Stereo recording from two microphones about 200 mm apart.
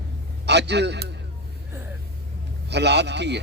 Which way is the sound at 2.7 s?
60° right (ahead or behind).